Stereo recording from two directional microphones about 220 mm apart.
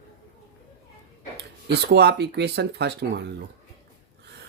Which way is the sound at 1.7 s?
50° right (ahead or behind).